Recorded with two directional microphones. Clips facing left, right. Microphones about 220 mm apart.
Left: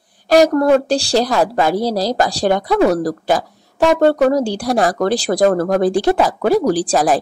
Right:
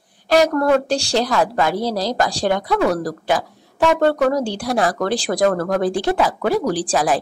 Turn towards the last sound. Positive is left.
turn(degrees=40)  # may be behind; listen again after turning